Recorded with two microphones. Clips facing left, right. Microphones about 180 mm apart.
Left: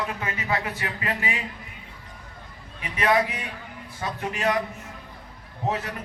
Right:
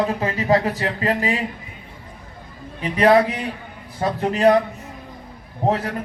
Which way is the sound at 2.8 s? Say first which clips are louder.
Right 8 dB; 35° right (ahead or behind).